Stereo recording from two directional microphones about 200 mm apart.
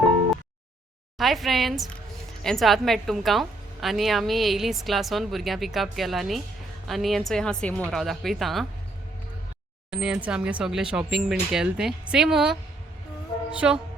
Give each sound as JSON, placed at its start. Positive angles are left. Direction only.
{"t": 1.2, "sound": "a woman's voice", "side_deg": 0}
{"t": 9.9, "sound": "a woman's voice", "side_deg": -5}
{"t": 13.6, "sound": "music", "side_deg": -5}